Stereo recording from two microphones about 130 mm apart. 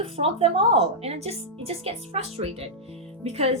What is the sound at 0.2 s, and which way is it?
Speech, 45° right (ahead or behind).